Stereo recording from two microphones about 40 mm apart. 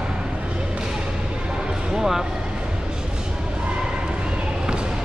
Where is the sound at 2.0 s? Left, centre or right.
Centre.